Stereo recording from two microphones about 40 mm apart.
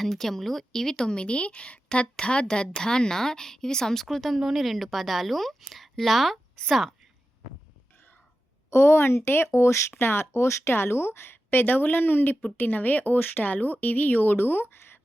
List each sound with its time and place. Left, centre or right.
0.0 s a woman's voice: centre
8.7 s speech: left
10.0 s speech: left